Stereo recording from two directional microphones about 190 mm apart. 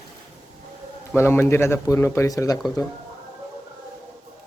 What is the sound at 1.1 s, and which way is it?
Speech, 15° left (ahead or behind).